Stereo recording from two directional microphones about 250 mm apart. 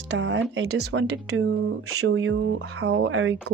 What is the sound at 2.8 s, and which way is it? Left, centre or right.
Speech, right.